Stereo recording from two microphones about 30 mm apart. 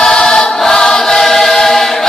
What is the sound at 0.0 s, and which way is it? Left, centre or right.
Choir, left.